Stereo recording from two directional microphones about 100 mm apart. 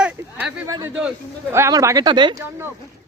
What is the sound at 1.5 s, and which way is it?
Speech, 30° right (ahead or behind).